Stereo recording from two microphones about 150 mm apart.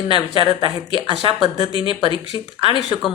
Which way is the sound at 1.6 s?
35° left (ahead or behind).